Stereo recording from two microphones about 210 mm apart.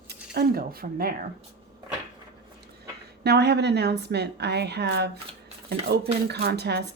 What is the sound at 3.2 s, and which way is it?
A woman's voice, 50° right (ahead or behind).